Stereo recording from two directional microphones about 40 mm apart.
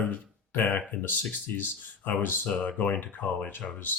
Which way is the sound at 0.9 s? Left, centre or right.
Left.